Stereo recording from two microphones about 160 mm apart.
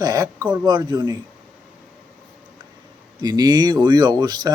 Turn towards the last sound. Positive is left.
turn(degrees=-25)  # may be behind; listen again after turning